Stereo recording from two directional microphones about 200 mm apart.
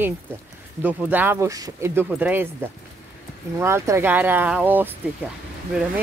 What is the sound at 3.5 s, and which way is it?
Speech, 15° right (ahead or behind).